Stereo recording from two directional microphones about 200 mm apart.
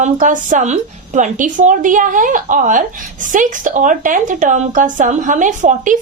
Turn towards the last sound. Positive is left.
turn(degrees=-40)  # may be behind; listen again after turning